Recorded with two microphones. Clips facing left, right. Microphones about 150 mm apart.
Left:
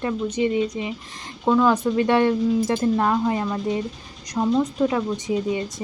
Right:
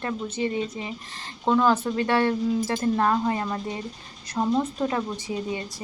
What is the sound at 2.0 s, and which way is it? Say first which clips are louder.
Speech: left 6 dB; 20° left (ahead or behind).